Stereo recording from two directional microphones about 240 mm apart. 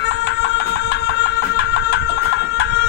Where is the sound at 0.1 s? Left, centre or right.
Left.